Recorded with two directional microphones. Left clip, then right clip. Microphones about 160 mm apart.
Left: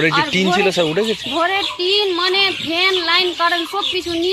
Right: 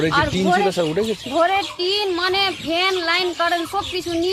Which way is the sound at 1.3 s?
30° right (ahead or behind).